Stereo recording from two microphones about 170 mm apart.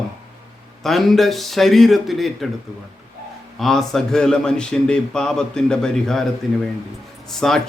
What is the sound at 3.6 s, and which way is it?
Speech, centre (ahead or behind).